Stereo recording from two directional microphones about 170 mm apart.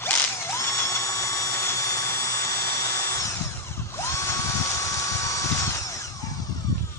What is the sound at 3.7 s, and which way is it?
Dental drill, 15° left (ahead or behind).